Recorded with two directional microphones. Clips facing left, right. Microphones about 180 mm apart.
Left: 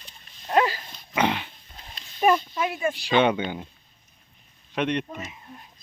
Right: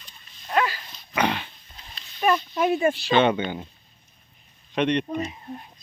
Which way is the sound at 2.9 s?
15° left (ahead or behind).